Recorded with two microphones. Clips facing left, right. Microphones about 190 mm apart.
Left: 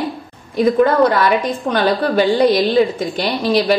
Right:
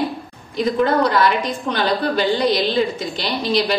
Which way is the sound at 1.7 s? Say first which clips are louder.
Left 4 dB; 50° left (ahead or behind).